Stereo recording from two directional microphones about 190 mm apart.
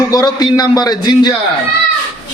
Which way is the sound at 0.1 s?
20° left (ahead or behind).